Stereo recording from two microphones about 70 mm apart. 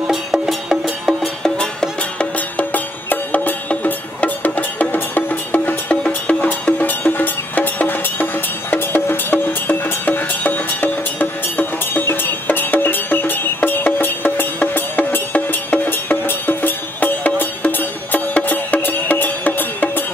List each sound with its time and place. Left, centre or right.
0.1 s music: centre
1.6 s music: centre